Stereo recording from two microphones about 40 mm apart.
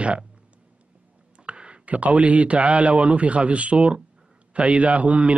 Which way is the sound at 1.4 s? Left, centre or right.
Right.